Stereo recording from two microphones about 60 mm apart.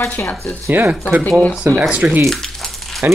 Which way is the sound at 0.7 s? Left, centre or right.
Right.